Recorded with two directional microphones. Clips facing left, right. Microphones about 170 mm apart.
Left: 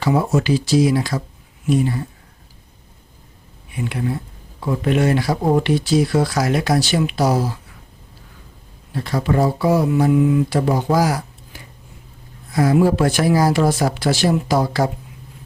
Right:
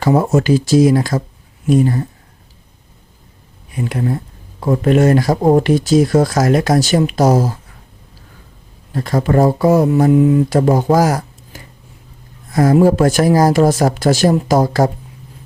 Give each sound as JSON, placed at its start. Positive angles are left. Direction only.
{"t": 0.0, "sound": "speech", "side_deg": -45}
{"t": 3.7, "sound": "speech", "side_deg": -40}
{"t": 8.9, "sound": "speech", "side_deg": -45}